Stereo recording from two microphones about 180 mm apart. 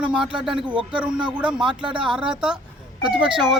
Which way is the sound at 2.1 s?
5° right (ahead or behind).